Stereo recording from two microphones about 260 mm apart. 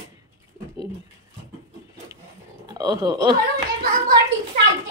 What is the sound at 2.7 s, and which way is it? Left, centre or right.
Speech, centre.